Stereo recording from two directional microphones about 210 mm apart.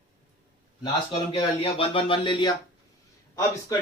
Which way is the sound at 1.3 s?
25° left (ahead or behind).